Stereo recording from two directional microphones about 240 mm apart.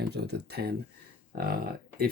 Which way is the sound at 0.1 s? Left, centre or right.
Right.